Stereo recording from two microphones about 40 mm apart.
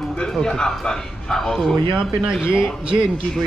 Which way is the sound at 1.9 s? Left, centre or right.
Right.